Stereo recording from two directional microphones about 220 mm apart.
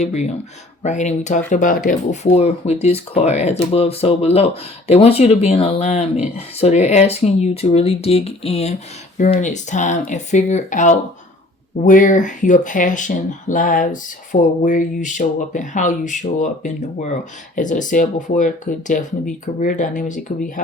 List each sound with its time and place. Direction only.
0.8 s speech: 30° left (ahead or behind)